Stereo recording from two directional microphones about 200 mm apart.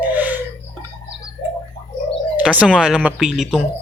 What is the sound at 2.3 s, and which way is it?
Speech, 5° right (ahead or behind).